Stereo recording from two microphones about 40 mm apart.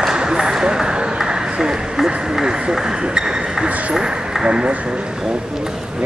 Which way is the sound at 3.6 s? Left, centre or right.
Right.